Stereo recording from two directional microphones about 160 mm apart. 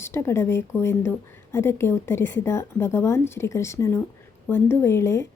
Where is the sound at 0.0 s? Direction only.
15° left (ahead or behind).